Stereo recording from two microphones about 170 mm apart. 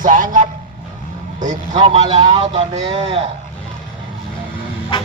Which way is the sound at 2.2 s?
30° right (ahead or behind).